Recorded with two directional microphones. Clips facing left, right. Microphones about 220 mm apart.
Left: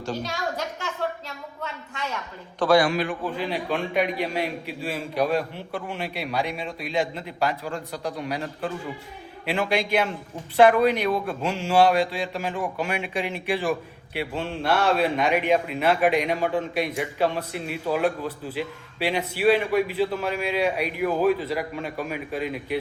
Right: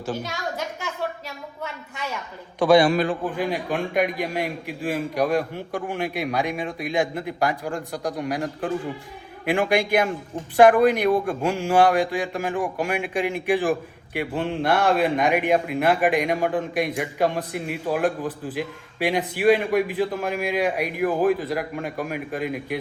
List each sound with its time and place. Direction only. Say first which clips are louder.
2.6 s a man's voice: right 3 dB; 15° right (ahead or behind)
2.8 s a man's voice: right 4 dB; 35° right (ahead or behind)
3.3 s a man's voice: right 2 dB; 15° right (ahead or behind)
9.5 s a man's voice: right 3 dB; 15° right (ahead or behind)